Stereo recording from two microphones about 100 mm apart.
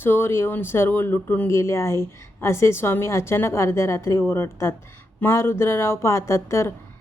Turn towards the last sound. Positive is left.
turn(degrees=30)  # may be behind; listen again after turning